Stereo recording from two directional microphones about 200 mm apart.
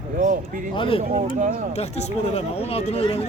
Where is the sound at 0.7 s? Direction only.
25° left (ahead or behind).